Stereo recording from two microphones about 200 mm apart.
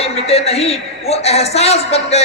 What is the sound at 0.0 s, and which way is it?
A man's voice, 30° left (ahead or behind).